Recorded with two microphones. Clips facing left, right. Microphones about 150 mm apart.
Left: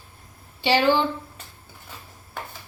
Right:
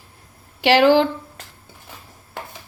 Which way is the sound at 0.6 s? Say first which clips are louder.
Right 6 dB; 90° right.